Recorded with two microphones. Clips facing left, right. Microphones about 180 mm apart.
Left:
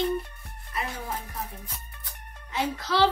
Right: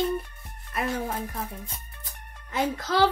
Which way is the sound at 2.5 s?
50° right (ahead or behind).